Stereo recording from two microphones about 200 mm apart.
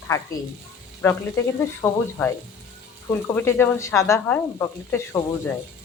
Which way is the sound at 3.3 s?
10° left (ahead or behind).